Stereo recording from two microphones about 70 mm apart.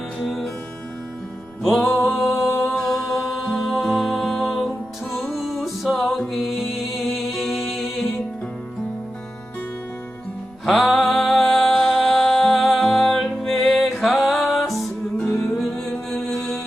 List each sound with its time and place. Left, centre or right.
0.2 s music: centre
1.6 s music: centre
10.7 s music: centre